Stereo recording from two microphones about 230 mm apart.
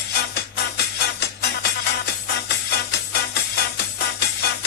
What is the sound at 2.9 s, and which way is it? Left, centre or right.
Music, left.